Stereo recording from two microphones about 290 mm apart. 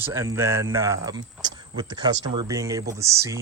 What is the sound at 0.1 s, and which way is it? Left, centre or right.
Speech, centre.